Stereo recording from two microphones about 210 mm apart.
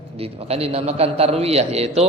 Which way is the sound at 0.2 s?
30° right (ahead or behind).